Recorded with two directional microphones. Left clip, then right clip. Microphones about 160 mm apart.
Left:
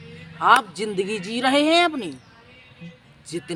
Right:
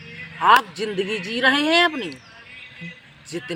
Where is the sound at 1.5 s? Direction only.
40° left (ahead or behind).